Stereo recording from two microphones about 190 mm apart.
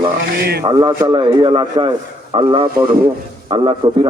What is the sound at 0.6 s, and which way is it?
A man's voice, 20° right (ahead or behind).